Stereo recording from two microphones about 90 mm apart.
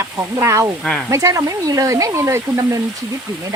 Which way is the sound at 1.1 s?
35° right (ahead or behind).